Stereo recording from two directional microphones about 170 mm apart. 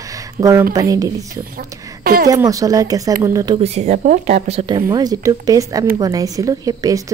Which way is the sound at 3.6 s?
40° right (ahead or behind).